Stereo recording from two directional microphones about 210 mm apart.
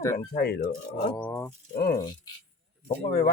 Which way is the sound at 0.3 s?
50° left (ahead or behind).